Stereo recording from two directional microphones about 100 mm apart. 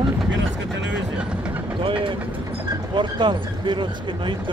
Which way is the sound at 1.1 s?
10° right (ahead or behind).